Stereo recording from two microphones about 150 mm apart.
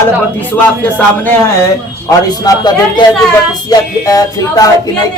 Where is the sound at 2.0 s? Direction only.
25° left (ahead or behind).